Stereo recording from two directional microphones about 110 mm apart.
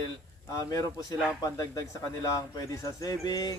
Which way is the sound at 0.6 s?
30° left (ahead or behind).